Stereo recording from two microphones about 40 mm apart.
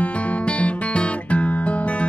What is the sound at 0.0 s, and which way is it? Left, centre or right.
Music, left.